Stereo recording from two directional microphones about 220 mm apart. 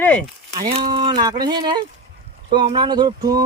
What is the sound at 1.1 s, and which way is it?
Speech, 20° right (ahead or behind).